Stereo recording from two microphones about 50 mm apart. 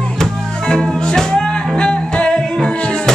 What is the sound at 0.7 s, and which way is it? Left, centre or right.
Music, centre.